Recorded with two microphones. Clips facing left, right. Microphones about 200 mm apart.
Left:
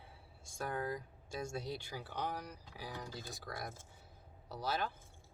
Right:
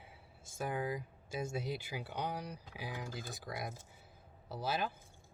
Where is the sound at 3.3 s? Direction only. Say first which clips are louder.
Right 2 dB; centre (ahead or behind).